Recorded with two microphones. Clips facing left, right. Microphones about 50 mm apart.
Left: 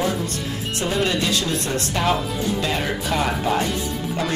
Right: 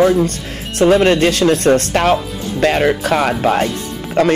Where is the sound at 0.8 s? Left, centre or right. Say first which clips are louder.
Right 12 dB; right.